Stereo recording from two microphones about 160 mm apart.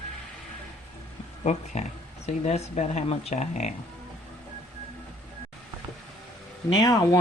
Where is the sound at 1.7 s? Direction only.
45° left (ahead or behind).